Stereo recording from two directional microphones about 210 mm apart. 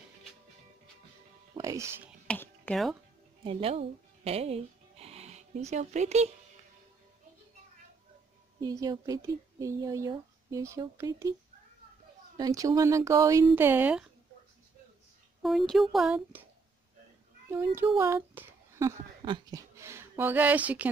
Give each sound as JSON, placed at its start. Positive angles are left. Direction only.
{"t": 1.5, "sound": "speech", "side_deg": -15}
{"t": 2.2, "sound": "a sound", "side_deg": 10}
{"t": 3.4, "sound": "speech", "side_deg": -30}
{"t": 8.5, "sound": "speech", "side_deg": -20}
{"t": 12.4, "sound": "speech", "side_deg": -15}
{"t": 15.4, "sound": "speech", "side_deg": 0}
{"t": 17.7, "sound": "speech", "side_deg": -10}